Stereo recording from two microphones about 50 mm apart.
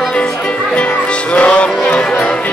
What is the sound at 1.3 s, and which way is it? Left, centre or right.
Music, left.